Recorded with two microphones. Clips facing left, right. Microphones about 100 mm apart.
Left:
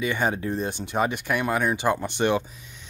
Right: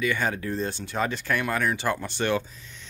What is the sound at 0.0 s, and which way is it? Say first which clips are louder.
Speech: left 2 dB; 25° left (ahead or behind).